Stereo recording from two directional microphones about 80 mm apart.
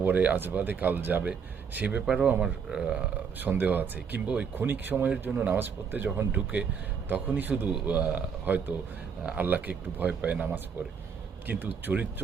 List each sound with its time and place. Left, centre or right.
0.0 s speech: right
2.0 s speech: centre
3.3 s speech: right